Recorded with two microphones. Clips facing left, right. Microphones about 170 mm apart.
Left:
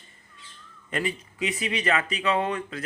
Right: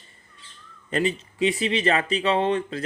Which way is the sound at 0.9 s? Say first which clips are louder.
Right 5 dB; 25° right (ahead or behind).